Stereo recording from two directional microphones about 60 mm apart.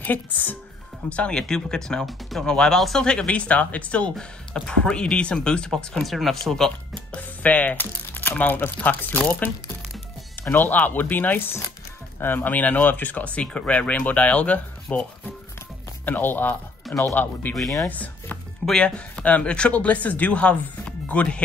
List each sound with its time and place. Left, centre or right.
0.0 s speech: left
1.0 s speech: centre
6.0 s speech: centre
6.9 s speech: left
10.5 s speech: left